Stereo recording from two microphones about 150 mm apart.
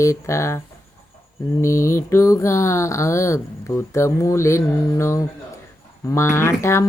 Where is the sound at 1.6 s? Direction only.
20° left (ahead or behind).